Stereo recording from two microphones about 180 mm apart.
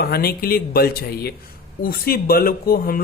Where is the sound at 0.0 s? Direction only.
60° left (ahead or behind).